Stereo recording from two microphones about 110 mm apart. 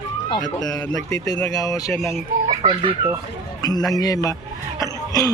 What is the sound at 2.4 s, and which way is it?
Speech, 45° right (ahead or behind).